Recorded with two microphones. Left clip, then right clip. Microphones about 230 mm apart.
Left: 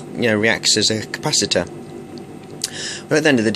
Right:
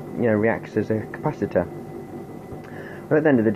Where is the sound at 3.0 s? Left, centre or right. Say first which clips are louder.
Left 3 dB; left.